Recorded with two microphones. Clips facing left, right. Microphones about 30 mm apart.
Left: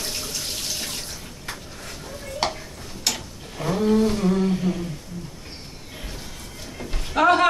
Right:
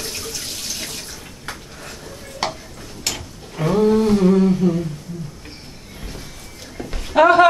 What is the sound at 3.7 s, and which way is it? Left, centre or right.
Humming, centre.